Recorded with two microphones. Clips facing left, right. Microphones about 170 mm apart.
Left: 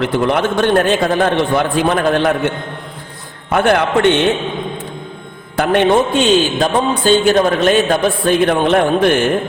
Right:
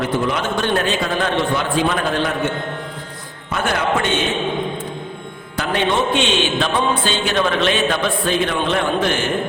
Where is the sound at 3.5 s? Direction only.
60° left (ahead or behind).